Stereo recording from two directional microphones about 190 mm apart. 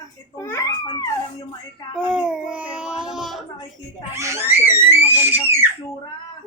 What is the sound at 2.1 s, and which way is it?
Speech, 5° right (ahead or behind).